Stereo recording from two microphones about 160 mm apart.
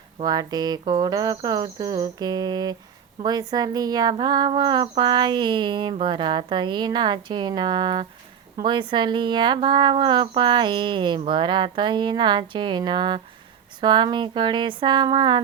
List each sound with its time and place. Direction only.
0.3 s speech: 25° right (ahead or behind)